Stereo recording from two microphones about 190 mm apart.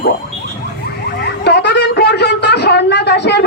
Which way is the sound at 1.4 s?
60° left (ahead or behind).